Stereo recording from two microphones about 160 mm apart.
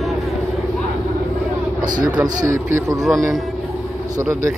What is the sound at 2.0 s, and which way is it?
Speech, 20° right (ahead or behind).